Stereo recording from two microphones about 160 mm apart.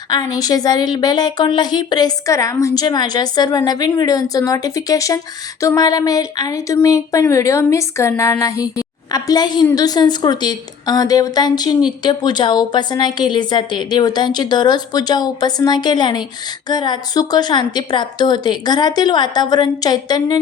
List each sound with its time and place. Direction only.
0.1 s a woman's voice: 25° left (ahead or behind)